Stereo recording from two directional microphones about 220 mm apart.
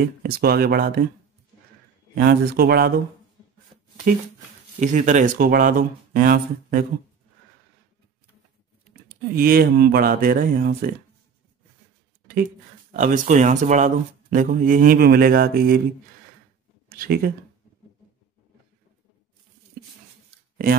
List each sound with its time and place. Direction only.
0.0 s speech: 45° right (ahead or behind)
2.1 s speech: 45° right (ahead or behind)
4.1 s speech: 35° right (ahead or behind)
8.8 s speech: 40° right (ahead or behind)
12.9 s speech: 35° right (ahead or behind)
16.9 s speech: 40° right (ahead or behind)